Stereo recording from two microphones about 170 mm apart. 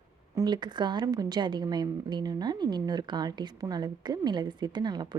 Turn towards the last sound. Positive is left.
turn(degrees=-25)  # may be behind; listen again after turning